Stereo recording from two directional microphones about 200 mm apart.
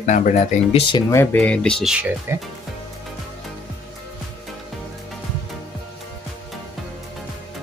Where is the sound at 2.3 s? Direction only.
10° right (ahead or behind).